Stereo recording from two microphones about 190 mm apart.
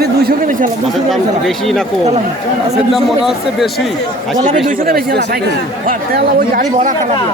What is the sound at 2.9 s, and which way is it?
Speech, centre (ahead or behind).